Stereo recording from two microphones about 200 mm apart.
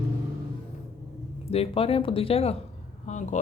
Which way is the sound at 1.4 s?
30° left (ahead or behind).